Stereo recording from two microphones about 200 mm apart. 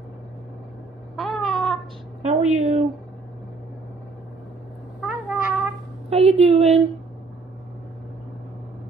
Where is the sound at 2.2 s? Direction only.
35° right (ahead or behind).